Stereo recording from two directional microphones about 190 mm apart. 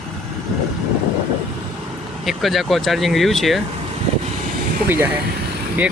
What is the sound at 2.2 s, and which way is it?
Speech, centre (ahead or behind).